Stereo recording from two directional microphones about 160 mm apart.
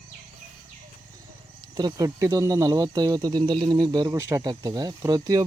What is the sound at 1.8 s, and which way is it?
Speech, 25° right (ahead or behind).